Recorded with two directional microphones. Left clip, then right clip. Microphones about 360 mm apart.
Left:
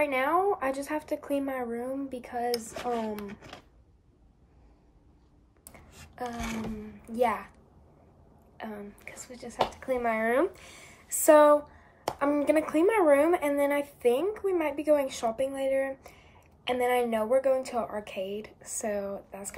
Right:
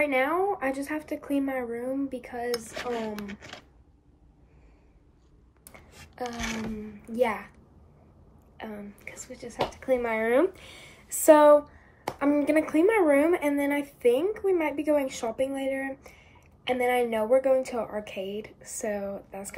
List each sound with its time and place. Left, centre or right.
0.0 s speech: centre
3.2 s speech: centre
6.2 s speech: right
8.5 s speech: centre